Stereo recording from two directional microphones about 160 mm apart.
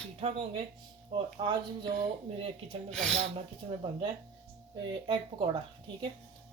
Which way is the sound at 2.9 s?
5° left (ahead or behind).